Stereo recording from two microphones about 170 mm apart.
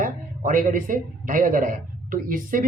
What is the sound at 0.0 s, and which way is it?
Speech, 50° right (ahead or behind).